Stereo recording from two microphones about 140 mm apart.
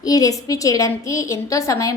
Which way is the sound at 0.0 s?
25° left (ahead or behind).